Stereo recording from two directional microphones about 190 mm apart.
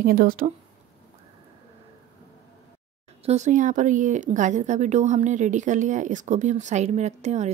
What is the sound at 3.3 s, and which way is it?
Speech, 40° right (ahead or behind).